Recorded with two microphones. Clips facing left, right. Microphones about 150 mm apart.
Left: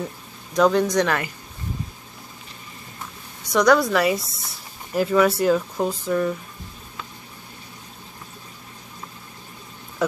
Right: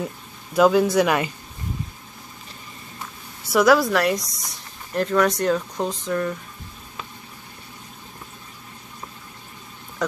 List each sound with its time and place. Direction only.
0.5 s speech: 5° right (ahead or behind)
3.4 s speech: 5° right (ahead or behind)